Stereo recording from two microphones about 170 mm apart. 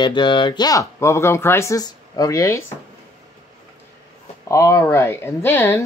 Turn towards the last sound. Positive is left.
turn(degrees=10)  # may be behind; listen again after turning